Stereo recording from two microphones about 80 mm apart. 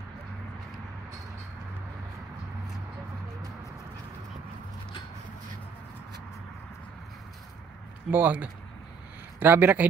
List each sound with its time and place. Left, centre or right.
8.1 s speech: right